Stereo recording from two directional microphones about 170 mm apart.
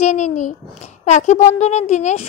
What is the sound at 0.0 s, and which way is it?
Speech, 45° left (ahead or behind).